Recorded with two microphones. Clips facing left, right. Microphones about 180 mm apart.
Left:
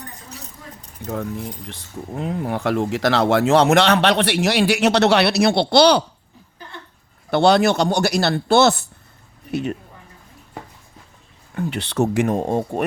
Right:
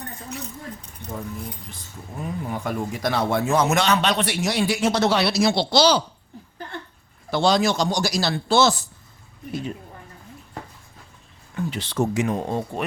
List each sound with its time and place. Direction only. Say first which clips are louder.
1.0 s speech: left 6 dB; 65° left (ahead or behind)
7.3 s speech: left 5 dB; 60° left (ahead or behind)
11.5 s speech: left 3 dB; 65° left (ahead or behind); by 12.8 s 50° left (ahead or behind)